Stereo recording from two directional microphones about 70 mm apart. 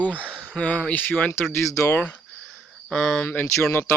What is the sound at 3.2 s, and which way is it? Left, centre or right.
Speech, left.